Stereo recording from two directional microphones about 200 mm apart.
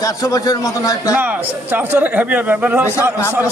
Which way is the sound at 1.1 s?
10° right (ahead or behind).